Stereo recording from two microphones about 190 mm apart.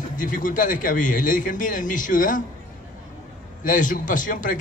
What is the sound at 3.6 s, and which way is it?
Speech, 45° left (ahead or behind).